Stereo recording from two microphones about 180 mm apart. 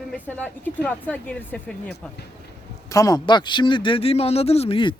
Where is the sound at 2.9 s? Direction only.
20° left (ahead or behind).